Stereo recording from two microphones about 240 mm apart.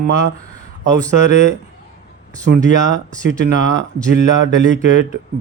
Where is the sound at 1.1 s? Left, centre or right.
Right.